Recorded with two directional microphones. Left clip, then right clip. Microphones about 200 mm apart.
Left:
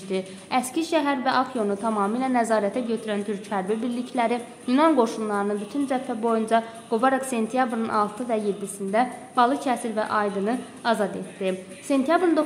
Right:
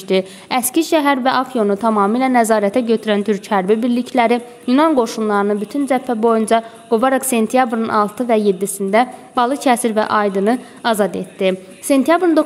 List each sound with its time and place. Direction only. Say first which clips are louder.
0.1 s a woman's voice: right 9 dB; 45° right (ahead or behind)